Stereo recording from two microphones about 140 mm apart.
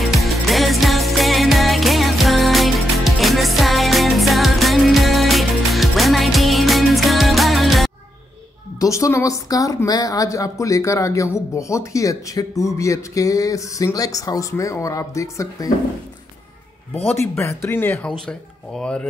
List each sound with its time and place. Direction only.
0.1 s music: centre (ahead or behind)
8.7 s speech: 25° left (ahead or behind)
17.0 s speech: 15° left (ahead or behind)
17.9 s speech: 5° left (ahead or behind)